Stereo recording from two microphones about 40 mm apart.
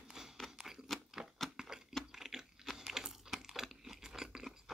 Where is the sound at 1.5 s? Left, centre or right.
Centre.